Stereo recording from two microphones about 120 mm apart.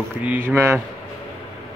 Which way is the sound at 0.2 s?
15° right (ahead or behind).